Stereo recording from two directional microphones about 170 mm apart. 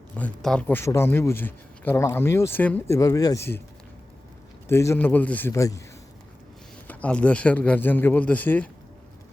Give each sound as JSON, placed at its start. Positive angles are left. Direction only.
{"t": 0.1, "sound": "speech", "side_deg": 10}
{"t": 4.7, "sound": "speech", "side_deg": 15}
{"t": 6.8, "sound": "speech", "side_deg": 10}